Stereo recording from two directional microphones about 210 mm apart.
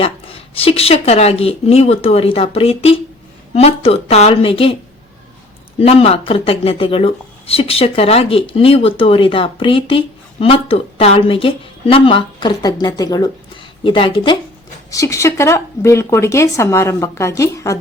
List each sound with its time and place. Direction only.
0.0 s speech: 25° left (ahead or behind)
5.8 s speech: 30° left (ahead or behind)